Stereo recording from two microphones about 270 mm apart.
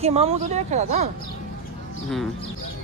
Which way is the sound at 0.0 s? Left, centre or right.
Right.